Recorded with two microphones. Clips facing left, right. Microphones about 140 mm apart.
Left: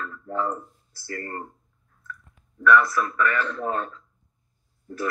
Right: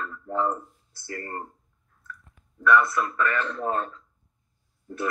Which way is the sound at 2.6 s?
25° right (ahead or behind).